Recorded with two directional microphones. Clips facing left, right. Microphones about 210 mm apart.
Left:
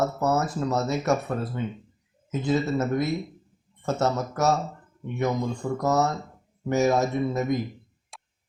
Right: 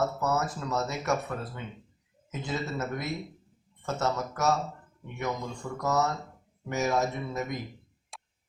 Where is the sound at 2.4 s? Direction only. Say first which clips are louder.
Left 9 dB; 35° left (ahead or behind).